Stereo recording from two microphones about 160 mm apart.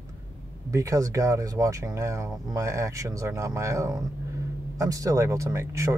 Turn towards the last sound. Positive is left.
turn(degrees=-20)  # may be behind; listen again after turning